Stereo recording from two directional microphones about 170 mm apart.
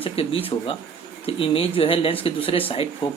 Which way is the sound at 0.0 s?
35° left (ahead or behind).